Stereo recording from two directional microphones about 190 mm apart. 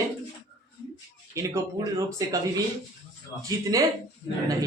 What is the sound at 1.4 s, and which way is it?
Speech, 15° right (ahead or behind).